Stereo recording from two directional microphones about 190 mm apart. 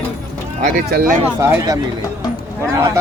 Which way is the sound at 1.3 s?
10° right (ahead or behind).